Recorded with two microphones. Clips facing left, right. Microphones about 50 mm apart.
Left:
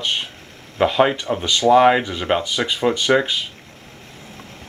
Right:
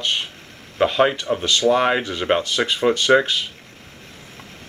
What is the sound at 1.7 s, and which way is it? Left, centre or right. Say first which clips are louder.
Speech: left 6 dB; centre.